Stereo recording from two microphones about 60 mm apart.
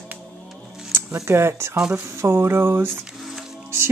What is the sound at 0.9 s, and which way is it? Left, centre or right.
Music, right.